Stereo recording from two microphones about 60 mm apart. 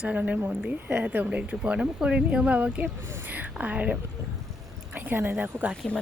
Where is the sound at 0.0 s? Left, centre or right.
Right.